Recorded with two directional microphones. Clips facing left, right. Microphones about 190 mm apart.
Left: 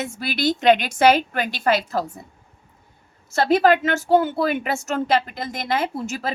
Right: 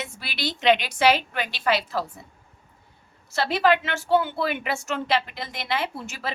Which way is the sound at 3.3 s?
45° left (ahead or behind).